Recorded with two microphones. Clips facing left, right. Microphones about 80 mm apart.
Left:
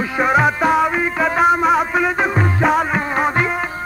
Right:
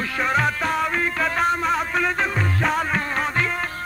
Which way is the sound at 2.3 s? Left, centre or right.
Left.